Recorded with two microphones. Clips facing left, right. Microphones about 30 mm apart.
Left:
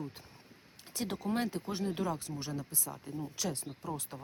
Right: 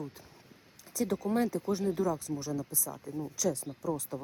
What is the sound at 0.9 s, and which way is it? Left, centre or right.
Speech, left.